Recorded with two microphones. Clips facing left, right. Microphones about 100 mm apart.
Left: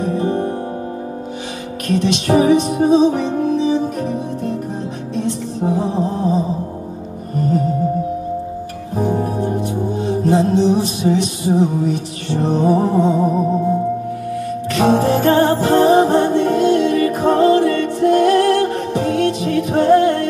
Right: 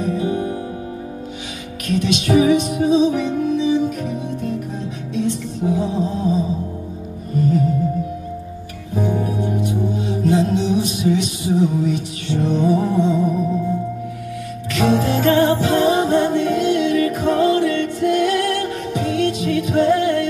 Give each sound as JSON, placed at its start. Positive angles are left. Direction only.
{"t": 0.0, "sound": "music", "side_deg": 40}
{"t": 1.9, "sound": "music", "side_deg": 40}
{"t": 8.9, "sound": "music", "side_deg": 40}
{"t": 14.7, "sound": "music", "side_deg": 40}